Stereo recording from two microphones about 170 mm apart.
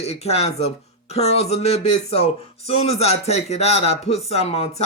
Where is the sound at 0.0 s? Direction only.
40° left (ahead or behind).